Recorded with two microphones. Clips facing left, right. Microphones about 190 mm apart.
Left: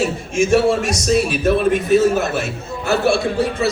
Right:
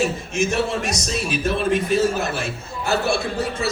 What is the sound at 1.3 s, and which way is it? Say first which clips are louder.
Speech: left 5 dB; 50° left (ahead or behind).